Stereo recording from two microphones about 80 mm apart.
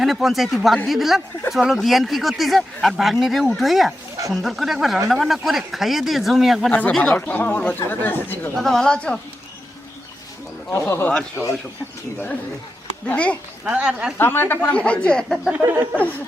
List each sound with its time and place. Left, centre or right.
0.0 s speech: centre
6.7 s speech: centre
8.5 s speech: centre
10.7 s speech: left
11.1 s speech: centre
13.1 s speech: centre
13.7 s speech: centre
14.2 s speech: left; by 15.4 s centre
15.6 s a sound: right